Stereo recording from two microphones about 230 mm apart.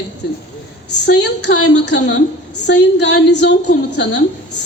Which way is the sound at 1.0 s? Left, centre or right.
Left.